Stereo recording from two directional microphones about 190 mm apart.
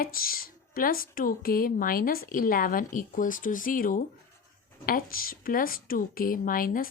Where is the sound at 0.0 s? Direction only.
50° left (ahead or behind).